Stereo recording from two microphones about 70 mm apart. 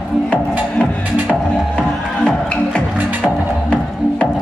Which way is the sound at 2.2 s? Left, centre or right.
Centre.